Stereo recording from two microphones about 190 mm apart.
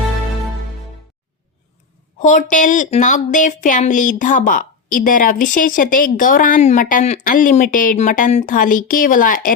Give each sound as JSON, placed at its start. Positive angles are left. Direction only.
{"t": 2.1, "sound": "speech", "side_deg": 40}